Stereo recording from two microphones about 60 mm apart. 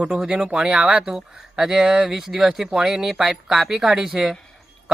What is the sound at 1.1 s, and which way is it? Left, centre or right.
Speech, centre.